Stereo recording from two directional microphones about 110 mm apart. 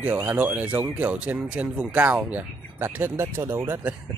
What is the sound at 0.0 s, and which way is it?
Speech, 15° right (ahead or behind).